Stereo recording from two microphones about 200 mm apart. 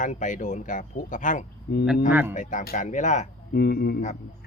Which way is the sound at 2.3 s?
45° left (ahead or behind).